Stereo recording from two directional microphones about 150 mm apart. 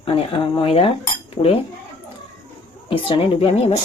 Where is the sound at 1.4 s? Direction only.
55° left (ahead or behind).